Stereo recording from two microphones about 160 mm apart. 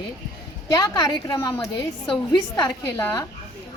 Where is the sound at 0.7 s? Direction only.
25° left (ahead or behind).